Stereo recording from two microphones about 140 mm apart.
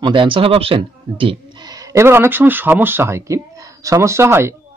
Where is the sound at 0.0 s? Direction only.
35° right (ahead or behind).